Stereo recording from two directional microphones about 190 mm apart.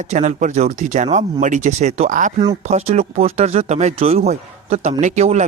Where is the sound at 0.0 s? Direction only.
40° right (ahead or behind).